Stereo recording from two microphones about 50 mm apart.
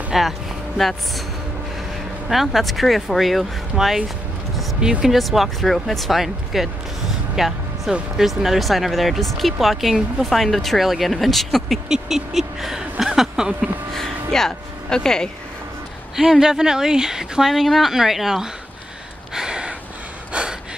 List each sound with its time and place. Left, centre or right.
0.1 s speech: centre
2.2 s speech: centre
5.0 s speech: centre
7.3 s music: centre
8.2 s speech: centre
13.0 s a sound: centre
13.9 s speech: centre
16.2 s speech: centre
19.3 s a sound: centre
20.3 s gasp: right